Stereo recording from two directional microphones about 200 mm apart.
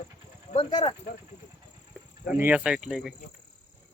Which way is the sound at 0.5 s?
25° left (ahead or behind).